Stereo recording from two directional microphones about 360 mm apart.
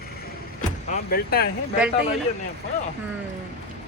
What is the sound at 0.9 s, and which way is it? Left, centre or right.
Speech, left.